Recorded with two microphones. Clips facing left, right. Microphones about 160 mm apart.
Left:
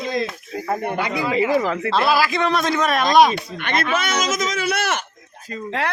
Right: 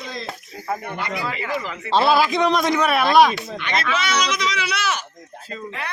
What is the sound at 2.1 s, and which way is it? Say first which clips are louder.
A man's voice: right 2 dB; 20° right (ahead or behind).